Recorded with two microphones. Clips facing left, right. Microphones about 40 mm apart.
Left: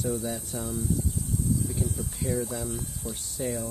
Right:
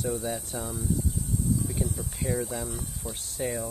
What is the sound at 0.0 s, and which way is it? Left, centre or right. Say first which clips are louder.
Speech: even; centre.